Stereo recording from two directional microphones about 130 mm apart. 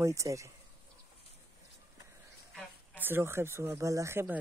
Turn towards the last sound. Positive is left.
turn(degrees=-20)  # may be behind; listen again after turning